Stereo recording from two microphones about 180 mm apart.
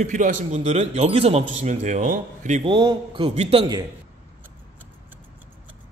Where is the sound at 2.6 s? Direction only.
25° right (ahead or behind).